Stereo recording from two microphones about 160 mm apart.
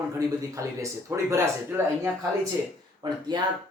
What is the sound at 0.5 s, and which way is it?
Speech, 20° right (ahead or behind).